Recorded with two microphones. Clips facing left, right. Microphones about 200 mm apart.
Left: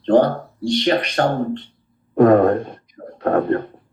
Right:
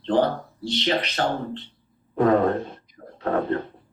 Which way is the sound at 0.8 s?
50° left (ahead or behind).